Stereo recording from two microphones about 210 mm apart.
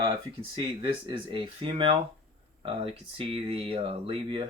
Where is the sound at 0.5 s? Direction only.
25° right (ahead or behind).